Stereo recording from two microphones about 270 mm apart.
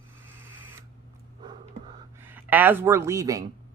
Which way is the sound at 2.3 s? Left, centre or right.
Centre.